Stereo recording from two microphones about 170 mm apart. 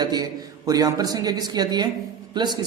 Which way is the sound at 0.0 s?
25° right (ahead or behind).